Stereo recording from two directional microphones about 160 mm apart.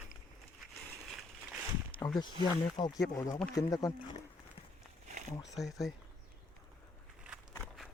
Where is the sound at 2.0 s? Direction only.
15° left (ahead or behind).